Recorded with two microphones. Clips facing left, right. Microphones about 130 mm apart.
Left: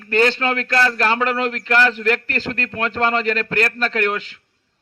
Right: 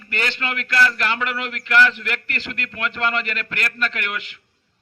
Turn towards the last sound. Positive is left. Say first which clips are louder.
# left 6 dB
turn(degrees=35)  # may be behind; listen again after turning